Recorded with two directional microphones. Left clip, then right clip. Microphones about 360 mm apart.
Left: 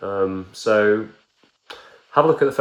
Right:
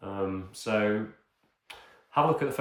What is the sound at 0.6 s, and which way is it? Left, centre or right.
Speech, centre.